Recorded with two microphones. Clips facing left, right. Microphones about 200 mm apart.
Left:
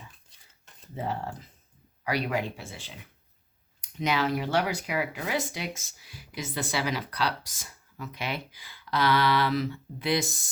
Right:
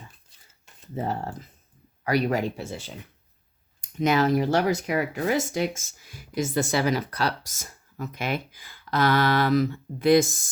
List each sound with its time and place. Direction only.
0.9 s speech: 45° right (ahead or behind)